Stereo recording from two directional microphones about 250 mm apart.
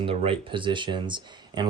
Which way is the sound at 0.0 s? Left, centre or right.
Right.